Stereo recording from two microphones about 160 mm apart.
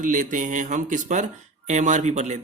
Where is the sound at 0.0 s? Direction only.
55° right (ahead or behind).